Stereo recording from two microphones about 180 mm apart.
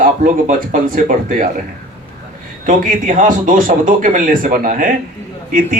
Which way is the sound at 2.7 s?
45° right (ahead or behind).